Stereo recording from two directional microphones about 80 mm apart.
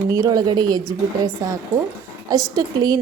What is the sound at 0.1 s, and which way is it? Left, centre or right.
A woman's voice, right.